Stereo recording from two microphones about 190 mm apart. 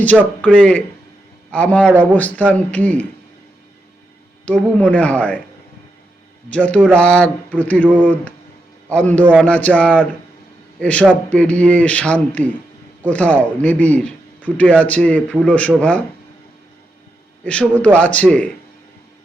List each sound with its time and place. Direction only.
0.4 s a man's voice: 5° left (ahead or behind)
4.4 s speech: 5° left (ahead or behind)
6.5 s speech: 5° left (ahead or behind)
17.4 s speech: 5° left (ahead or behind)